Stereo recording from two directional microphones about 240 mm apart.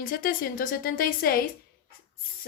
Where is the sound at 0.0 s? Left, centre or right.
Left.